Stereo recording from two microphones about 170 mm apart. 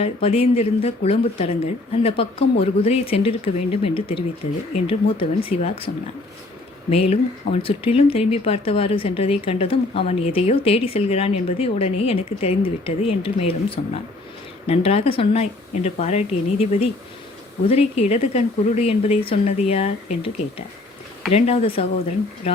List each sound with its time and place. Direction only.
0.0 s speech: 35° left (ahead or behind)
6.9 s speech: 40° left (ahead or behind)